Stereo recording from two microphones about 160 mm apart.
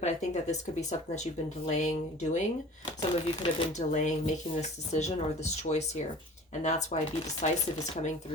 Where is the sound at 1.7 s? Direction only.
45° left (ahead or behind).